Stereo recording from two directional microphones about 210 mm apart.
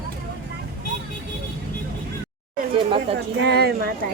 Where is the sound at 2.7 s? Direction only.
25° right (ahead or behind).